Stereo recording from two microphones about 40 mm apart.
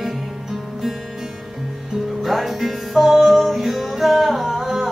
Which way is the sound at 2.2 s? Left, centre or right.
Centre.